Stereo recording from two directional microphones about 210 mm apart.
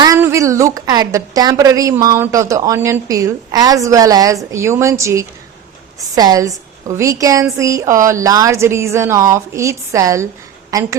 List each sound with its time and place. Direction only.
0.0 s a woman's voice: 15° right (ahead or behind)